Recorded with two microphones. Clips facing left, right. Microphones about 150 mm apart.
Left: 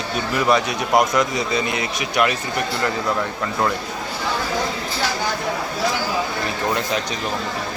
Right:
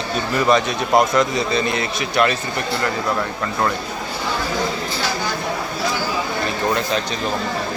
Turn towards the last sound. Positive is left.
turn(degrees=15)  # may be behind; listen again after turning